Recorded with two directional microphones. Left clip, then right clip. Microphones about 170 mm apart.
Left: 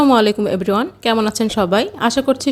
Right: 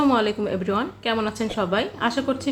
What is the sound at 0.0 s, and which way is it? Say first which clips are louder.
Speech: left 7 dB; 60° left (ahead or behind).